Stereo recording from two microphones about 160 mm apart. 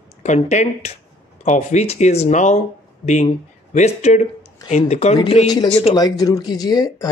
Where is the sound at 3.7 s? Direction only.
45° left (ahead or behind).